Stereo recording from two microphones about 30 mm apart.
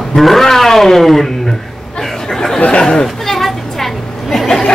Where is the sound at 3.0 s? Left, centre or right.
Centre.